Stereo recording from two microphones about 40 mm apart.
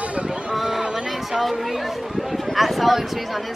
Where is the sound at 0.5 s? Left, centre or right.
Centre.